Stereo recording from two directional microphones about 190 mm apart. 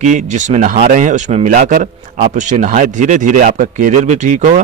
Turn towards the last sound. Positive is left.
turn(degrees=-40)  # may be behind; listen again after turning